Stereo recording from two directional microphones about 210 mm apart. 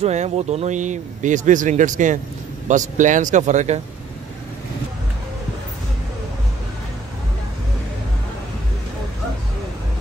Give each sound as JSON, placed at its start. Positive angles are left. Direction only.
{"t": 0.0, "sound": "speech", "side_deg": -30}